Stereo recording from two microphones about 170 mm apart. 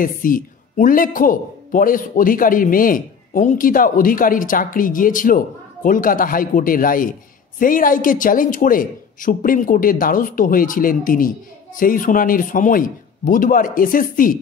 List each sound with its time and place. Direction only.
0.0 s a man's voice: 55° left (ahead or behind)